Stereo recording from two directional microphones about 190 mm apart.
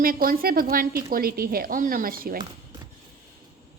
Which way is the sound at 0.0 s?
50° right (ahead or behind).